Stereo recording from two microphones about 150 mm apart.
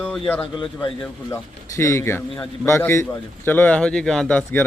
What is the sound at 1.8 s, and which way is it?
A man's voice, 20° left (ahead or behind).